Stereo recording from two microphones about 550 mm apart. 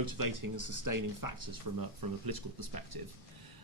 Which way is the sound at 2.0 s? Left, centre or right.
Right.